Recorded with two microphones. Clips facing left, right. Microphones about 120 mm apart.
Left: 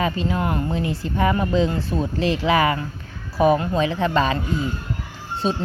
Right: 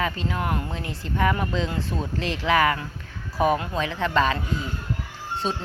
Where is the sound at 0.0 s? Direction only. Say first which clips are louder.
Left 4 dB; 10° left (ahead or behind).